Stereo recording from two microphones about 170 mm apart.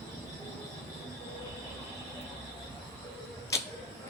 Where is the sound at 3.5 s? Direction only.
15° left (ahead or behind).